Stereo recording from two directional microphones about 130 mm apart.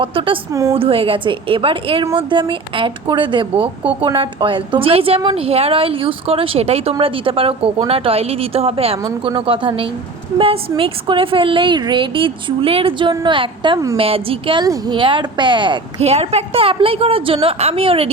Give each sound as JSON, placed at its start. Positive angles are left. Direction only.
{"t": 0.0, "sound": "a woman's voice", "side_deg": -40}
{"t": 0.5, "sound": "a woman's voice", "side_deg": -25}
{"t": 0.8, "sound": "a woman's voice", "side_deg": -45}
{"t": 16.0, "sound": "a woman's voice", "side_deg": -55}